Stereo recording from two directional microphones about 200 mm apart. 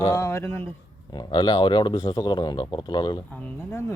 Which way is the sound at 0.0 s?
15° left (ahead or behind).